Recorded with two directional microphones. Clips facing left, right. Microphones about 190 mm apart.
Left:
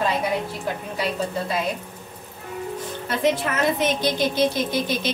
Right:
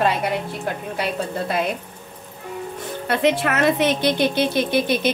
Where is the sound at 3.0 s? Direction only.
65° right (ahead or behind).